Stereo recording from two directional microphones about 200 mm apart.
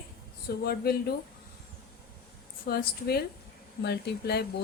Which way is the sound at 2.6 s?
50° left (ahead or behind).